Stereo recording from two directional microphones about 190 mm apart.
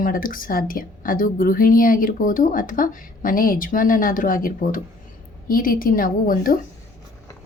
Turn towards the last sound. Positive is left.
turn(degrees=45)  # may be behind; listen again after turning